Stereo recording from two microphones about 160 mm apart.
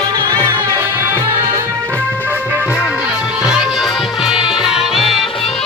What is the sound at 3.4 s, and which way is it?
Music, 5° right (ahead or behind).